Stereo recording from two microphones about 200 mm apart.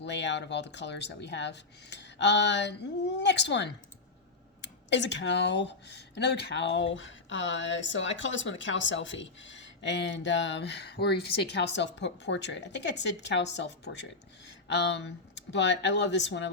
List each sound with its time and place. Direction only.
0.0 s speech: 65° left (ahead or behind)